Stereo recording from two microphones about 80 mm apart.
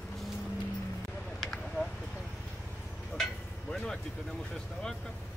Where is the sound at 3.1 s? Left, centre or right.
Centre.